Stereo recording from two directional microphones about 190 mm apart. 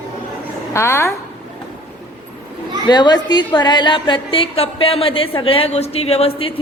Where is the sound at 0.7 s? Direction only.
15° left (ahead or behind).